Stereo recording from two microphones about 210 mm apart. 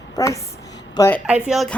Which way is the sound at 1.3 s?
Centre (ahead or behind).